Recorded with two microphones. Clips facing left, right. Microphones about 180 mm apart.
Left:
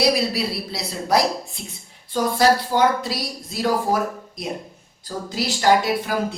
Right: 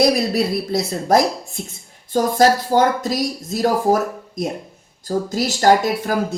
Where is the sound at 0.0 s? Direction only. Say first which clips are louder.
Right 4 dB; 50° right (ahead or behind).